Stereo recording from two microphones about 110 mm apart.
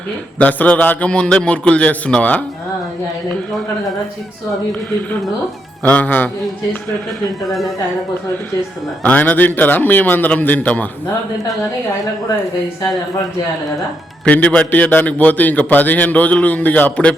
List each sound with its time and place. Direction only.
0.3 s a man's voice: 15° left (ahead or behind)
5.9 s a man's voice: 15° left (ahead or behind)
7.4 s speech: centre (ahead or behind)
9.0 s a man's voice: 15° left (ahead or behind)
14.3 s a man's voice: 15° left (ahead or behind)